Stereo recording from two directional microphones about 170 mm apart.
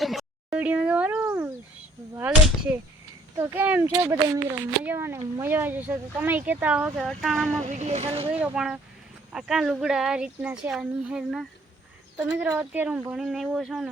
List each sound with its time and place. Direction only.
0.0 s a sound: centre (ahead or behind)
3.3 s speech: 15° right (ahead or behind)
7.6 s speech: 45° right (ahead or behind)
8.3 s speech: 5° right (ahead or behind)